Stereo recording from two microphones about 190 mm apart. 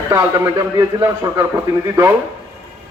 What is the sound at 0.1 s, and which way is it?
A man's voice, 15° right (ahead or behind).